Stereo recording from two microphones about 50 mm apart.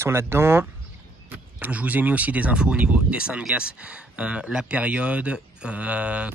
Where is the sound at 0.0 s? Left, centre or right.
Right.